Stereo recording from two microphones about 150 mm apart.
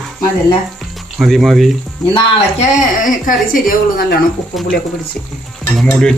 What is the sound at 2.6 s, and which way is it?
Speech, 55° left (ahead or behind).